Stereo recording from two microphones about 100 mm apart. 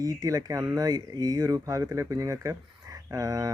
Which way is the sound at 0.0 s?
40° right (ahead or behind).